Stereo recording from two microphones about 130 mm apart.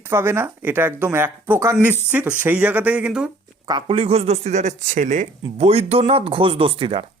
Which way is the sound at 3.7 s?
40° right (ahead or behind).